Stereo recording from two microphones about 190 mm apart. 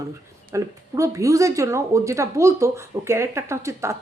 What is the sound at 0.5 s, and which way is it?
A woman's voice, 15° right (ahead or behind).